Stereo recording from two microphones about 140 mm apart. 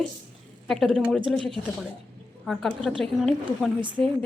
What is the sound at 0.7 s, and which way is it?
A woman's voice, centre (ahead or behind).